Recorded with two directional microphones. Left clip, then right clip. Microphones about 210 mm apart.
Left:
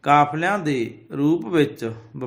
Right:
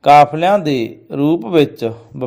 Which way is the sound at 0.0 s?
30° right (ahead or behind).